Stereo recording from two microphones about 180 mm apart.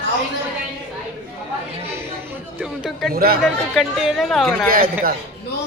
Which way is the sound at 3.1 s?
55° right (ahead or behind).